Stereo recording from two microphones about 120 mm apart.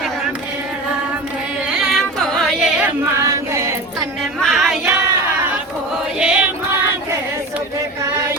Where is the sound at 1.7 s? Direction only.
Centre (ahead or behind).